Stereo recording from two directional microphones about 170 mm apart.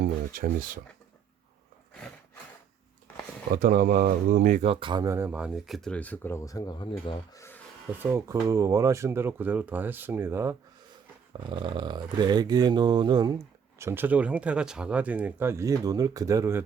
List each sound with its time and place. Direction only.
0.0 s speech: 60° right (ahead or behind)
3.6 s speech: 60° right (ahead or behind)
4.6 s speech: 30° right (ahead or behind); by 7.4 s 25° left (ahead or behind)
8.1 s speech: 20° right (ahead or behind)
11.4 s speech: 25° right (ahead or behind)
13.7 s speech: 15° right (ahead or behind)